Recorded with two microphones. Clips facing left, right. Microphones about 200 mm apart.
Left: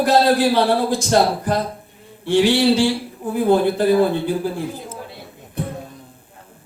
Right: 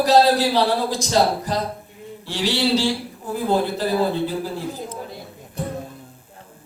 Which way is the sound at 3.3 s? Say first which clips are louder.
Left 5 dB; 55° left (ahead or behind).